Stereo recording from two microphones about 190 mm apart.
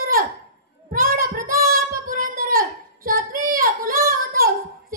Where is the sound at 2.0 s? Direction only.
45° right (ahead or behind).